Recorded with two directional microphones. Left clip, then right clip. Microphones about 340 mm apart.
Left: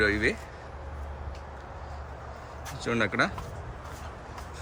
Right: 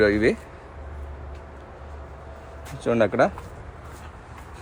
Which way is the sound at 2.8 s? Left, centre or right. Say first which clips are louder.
Right 7 dB; centre.